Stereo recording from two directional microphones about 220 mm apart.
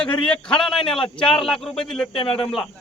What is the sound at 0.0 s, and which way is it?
Speech, 5° left (ahead or behind).